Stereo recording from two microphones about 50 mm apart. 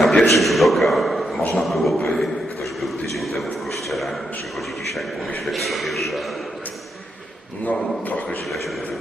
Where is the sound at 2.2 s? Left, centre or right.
Centre.